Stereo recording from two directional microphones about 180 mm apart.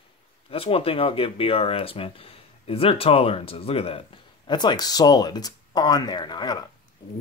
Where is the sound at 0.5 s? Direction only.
30° left (ahead or behind).